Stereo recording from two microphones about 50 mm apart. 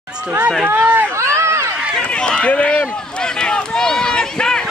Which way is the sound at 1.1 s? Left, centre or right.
Right.